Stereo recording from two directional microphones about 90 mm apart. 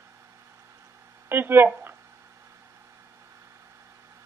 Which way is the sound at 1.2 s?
25° right (ahead or behind).